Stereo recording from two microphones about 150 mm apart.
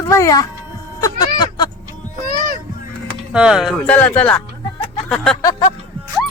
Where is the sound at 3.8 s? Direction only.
10° left (ahead or behind).